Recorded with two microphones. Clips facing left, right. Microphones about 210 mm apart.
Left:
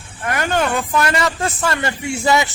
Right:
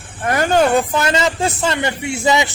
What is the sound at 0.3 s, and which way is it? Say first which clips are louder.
Speech: right 5 dB; 35° right (ahead or behind).